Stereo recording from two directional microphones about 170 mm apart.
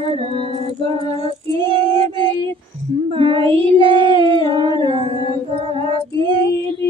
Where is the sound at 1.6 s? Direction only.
30° right (ahead or behind).